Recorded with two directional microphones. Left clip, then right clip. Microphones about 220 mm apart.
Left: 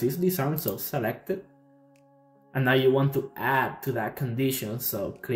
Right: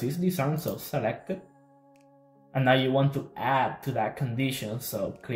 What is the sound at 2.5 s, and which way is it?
Speech, 15° left (ahead or behind).